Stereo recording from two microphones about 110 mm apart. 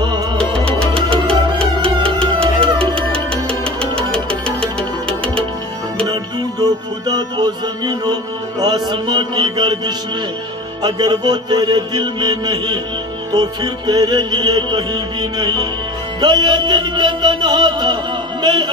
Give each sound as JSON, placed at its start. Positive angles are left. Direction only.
{"t": 0.4, "sound": "music", "side_deg": 10}
{"t": 2.4, "sound": "music", "side_deg": -55}
{"t": 2.9, "sound": "music", "side_deg": 10}
{"t": 7.1, "sound": "music", "side_deg": -35}
{"t": 18.4, "sound": "a man's voice", "side_deg": -40}